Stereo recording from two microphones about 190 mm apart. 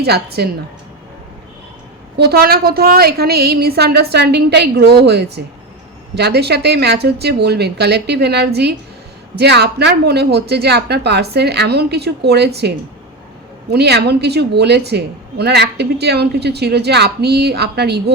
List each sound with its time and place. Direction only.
0.0 s a woman's voice: 55° right (ahead or behind)
2.1 s a woman's voice: 55° right (ahead or behind)